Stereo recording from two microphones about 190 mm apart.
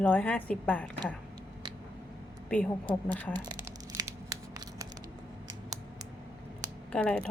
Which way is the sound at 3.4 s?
20° right (ahead or behind).